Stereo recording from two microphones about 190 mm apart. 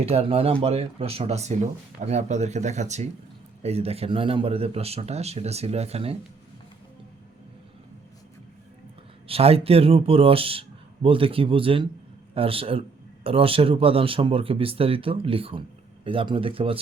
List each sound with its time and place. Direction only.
0.0 s speech: 30° right (ahead or behind)
9.2 s speech: 30° right (ahead or behind)